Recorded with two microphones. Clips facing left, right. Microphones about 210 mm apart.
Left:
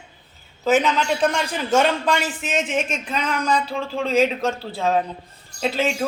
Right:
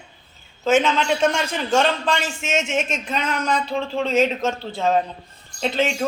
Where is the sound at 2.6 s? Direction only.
5° left (ahead or behind).